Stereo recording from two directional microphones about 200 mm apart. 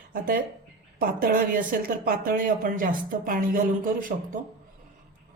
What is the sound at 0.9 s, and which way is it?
Speech, 45° right (ahead or behind).